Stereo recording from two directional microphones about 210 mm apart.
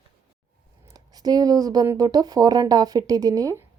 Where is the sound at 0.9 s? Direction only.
20° right (ahead or behind).